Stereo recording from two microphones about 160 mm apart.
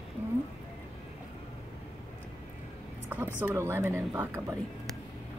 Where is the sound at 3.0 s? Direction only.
10° right (ahead or behind).